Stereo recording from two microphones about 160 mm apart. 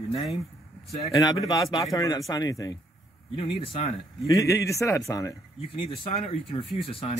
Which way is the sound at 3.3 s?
35° left (ahead or behind).